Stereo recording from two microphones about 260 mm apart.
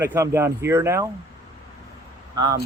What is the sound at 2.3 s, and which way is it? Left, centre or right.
Speech, centre.